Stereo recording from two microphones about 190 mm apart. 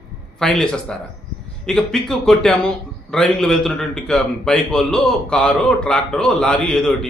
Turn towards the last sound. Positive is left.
turn(degrees=5)  # may be behind; listen again after turning